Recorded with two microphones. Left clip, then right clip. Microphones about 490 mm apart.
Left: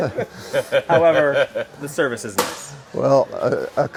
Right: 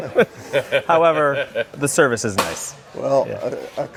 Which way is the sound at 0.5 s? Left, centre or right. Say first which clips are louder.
Left 1 dB; right.